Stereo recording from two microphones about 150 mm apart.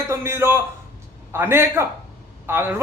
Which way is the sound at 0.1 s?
15° right (ahead or behind).